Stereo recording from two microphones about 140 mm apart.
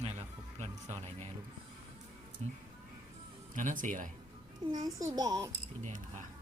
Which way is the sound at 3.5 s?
65° right (ahead or behind).